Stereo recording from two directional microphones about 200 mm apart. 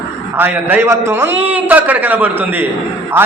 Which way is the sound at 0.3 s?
10° right (ahead or behind).